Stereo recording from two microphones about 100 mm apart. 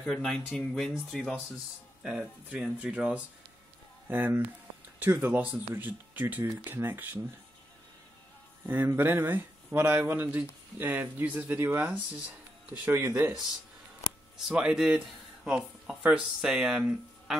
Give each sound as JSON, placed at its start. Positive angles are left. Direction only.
{"t": 0.0, "sound": "speech", "side_deg": 5}
{"t": 2.0, "sound": "speech", "side_deg": -5}
{"t": 8.6, "sound": "speech", "side_deg": -20}
{"t": 14.5, "sound": "speech", "side_deg": -10}